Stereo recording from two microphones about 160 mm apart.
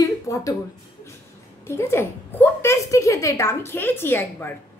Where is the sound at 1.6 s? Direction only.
15° left (ahead or behind).